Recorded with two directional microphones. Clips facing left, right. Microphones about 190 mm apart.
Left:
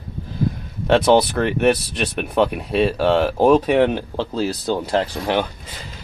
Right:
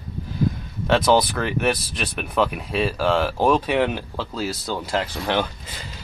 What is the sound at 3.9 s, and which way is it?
Speech, 20° left (ahead or behind).